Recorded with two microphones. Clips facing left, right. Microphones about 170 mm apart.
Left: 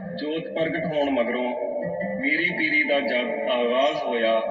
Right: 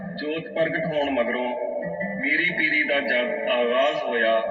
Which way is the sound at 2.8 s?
25° left (ahead or behind).